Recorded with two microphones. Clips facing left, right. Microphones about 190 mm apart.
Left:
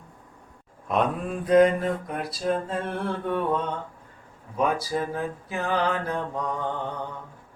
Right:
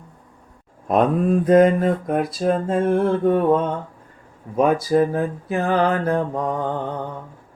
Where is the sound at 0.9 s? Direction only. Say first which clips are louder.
Right 8 dB; 40° right (ahead or behind).